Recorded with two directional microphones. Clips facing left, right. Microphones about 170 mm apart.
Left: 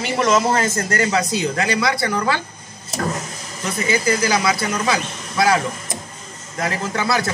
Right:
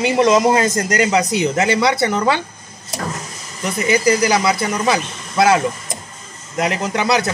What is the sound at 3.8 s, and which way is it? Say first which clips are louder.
A man's voice: right 4 dB; 15° right (ahead or behind).